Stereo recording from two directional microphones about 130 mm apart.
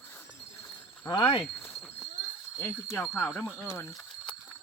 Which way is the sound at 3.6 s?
25° left (ahead or behind).